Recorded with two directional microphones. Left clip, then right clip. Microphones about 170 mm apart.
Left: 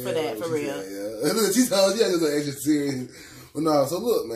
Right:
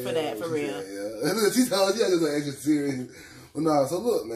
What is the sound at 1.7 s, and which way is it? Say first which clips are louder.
Speech: left 2 dB; 20° left (ahead or behind).